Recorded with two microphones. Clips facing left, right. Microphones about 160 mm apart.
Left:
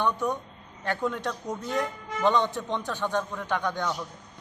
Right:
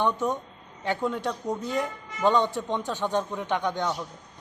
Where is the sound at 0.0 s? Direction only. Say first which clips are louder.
Right 1 dB; 15° right (ahead or behind).